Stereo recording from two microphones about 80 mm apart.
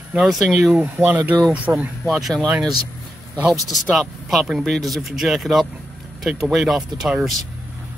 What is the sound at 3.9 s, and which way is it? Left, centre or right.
Speech, centre.